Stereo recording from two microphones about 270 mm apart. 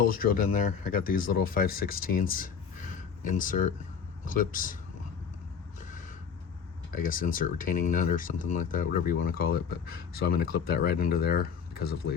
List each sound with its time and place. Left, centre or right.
0.1 s speech: left
6.9 s speech: left